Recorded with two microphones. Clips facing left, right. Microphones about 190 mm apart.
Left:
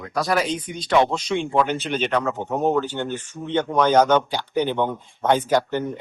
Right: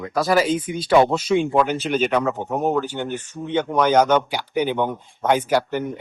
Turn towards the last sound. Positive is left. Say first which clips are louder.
# even
turn(degrees=-10)  # may be behind; listen again after turning